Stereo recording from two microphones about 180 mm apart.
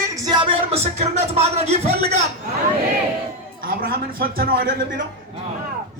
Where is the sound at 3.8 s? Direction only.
55° right (ahead or behind).